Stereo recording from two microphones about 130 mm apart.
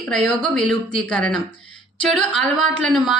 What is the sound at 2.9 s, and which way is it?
Speech, centre (ahead or behind).